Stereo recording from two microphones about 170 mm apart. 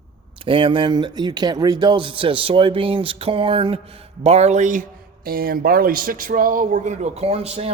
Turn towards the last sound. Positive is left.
turn(degrees=-35)  # may be behind; listen again after turning